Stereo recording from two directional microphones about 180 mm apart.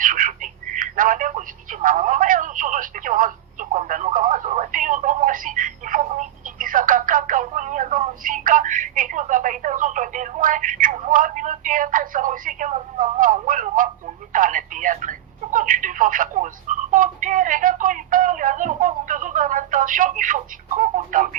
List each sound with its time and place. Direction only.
0.0 s speech: 50° right (ahead or behind)